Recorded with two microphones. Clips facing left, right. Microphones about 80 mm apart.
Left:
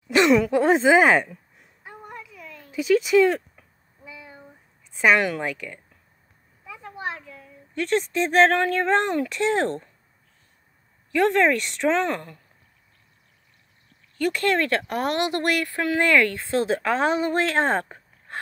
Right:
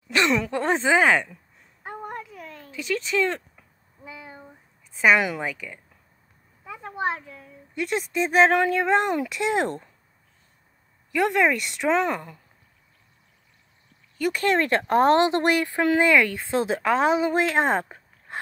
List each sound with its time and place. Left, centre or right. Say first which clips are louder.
0.1 s speech: left 5 dB; centre
1.8 s a sound: right 6 dB; right
2.7 s speech: left 8 dB; centre
4.0 s a sound: right 2 dB; right
4.9 s speech: even; centre
6.6 s a sound: right 5 dB; right
7.7 s speech: left 3 dB; centre
11.1 s a woman's voice: left 2 dB; centre
14.1 s speech: left 1 dB; centre
14.4 s speech: right 2 dB; right